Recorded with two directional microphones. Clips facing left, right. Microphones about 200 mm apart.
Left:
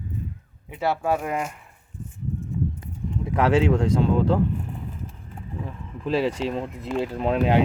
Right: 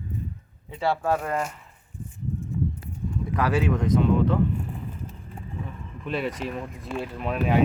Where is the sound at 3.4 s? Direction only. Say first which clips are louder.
Left 5 dB; 25° left (ahead or behind).